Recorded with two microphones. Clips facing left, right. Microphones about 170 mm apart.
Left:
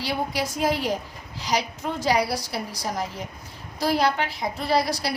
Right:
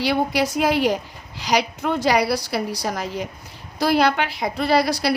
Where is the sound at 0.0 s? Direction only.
75° right (ahead or behind).